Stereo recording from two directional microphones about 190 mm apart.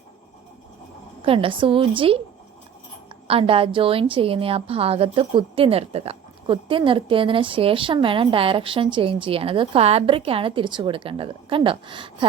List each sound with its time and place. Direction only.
1.2 s a woman's voice: 30° right (ahead or behind)
3.2 s a woman's voice: 30° right (ahead or behind)